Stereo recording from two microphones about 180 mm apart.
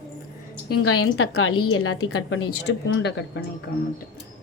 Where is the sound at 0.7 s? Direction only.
90° left.